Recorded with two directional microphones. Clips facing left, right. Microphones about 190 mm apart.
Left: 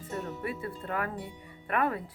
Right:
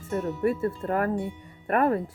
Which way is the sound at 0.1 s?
45° right (ahead or behind).